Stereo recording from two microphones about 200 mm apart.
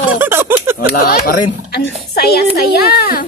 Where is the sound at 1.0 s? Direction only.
50° left (ahead or behind).